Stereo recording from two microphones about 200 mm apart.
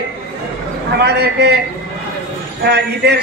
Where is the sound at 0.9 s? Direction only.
55° right (ahead or behind).